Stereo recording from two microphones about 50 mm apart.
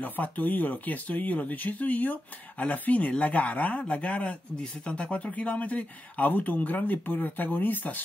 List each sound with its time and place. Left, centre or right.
0.0 s speech: left